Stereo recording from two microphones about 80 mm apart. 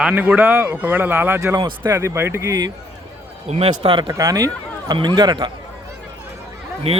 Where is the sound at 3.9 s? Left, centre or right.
Right.